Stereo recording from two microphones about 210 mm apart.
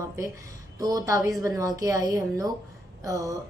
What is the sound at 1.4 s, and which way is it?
A woman's voice, 15° right (ahead or behind).